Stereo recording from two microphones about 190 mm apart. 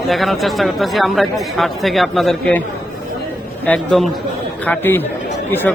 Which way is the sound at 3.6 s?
5° left (ahead or behind).